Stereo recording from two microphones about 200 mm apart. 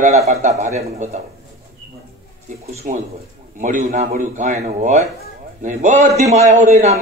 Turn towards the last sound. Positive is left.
turn(degrees=-35)  # may be behind; listen again after turning